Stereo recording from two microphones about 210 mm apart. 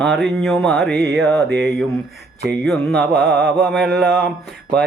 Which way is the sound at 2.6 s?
5° left (ahead or behind).